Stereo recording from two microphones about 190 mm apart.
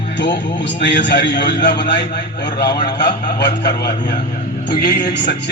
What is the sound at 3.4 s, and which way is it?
A man's voice, 60° left (ahead or behind).